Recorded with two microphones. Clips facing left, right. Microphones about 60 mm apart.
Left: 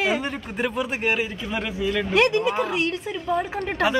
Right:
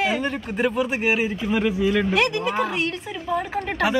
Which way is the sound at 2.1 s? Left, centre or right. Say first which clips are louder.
Left 2 dB; left.